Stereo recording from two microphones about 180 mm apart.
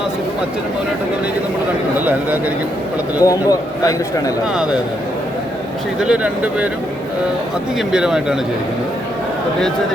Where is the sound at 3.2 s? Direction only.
20° left (ahead or behind).